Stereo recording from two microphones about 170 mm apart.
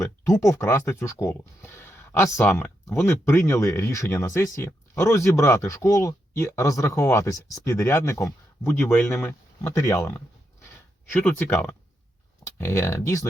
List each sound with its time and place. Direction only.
0.0 s speech: 20° left (ahead or behind)